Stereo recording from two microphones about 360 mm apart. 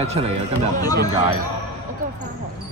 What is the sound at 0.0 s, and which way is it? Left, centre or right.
Speech, centre.